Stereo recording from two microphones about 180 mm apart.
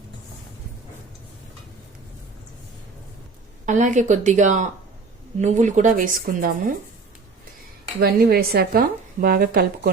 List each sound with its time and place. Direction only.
3.7 s speech: 45° right (ahead or behind)
7.9 s speech: 60° right (ahead or behind)